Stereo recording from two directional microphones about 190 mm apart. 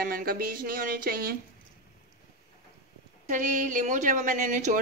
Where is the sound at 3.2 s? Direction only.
40° right (ahead or behind).